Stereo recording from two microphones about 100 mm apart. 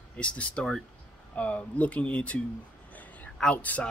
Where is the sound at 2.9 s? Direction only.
15° left (ahead or behind).